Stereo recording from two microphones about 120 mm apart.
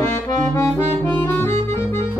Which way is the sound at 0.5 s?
20° left (ahead or behind).